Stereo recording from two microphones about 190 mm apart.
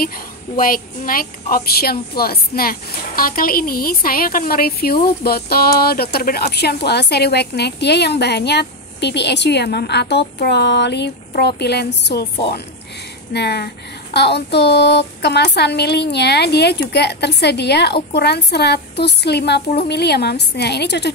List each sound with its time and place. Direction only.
0.0 s speech: 50° left (ahead or behind)